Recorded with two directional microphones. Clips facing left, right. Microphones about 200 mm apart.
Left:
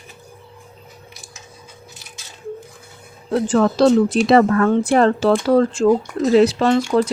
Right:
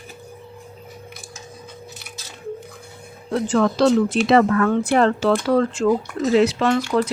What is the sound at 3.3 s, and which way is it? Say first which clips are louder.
Speech: left 2 dB; 35° left (ahead or behind).